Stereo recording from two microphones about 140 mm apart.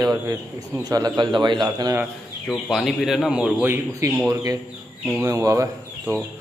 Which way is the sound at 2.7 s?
Centre (ahead or behind).